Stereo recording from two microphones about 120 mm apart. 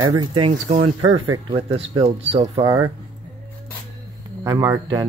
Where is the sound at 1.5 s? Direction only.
50° right (ahead or behind).